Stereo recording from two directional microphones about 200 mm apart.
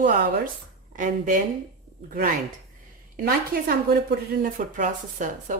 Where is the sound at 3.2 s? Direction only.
45° right (ahead or behind).